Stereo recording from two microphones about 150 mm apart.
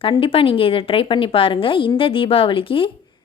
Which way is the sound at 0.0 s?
40° left (ahead or behind).